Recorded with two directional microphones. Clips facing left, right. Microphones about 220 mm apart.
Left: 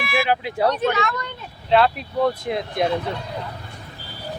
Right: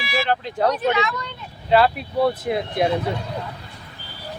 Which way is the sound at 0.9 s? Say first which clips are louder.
Right 1 dB; 55° left (ahead or behind).